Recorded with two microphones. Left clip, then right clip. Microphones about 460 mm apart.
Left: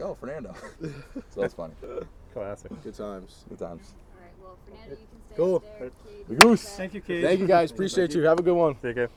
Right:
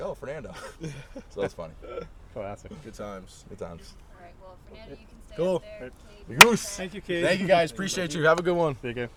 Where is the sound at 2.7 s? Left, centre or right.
Right.